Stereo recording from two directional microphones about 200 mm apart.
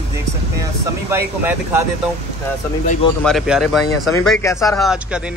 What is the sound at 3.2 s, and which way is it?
Speech, centre (ahead or behind).